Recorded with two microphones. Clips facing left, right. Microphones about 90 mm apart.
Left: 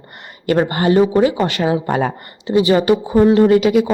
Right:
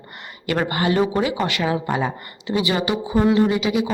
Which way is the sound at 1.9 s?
50° left (ahead or behind).